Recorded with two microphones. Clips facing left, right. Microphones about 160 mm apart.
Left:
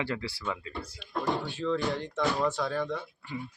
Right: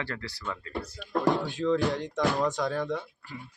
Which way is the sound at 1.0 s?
45° right (ahead or behind).